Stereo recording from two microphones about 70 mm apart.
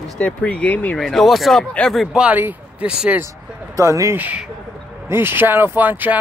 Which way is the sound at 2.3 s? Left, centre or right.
Right.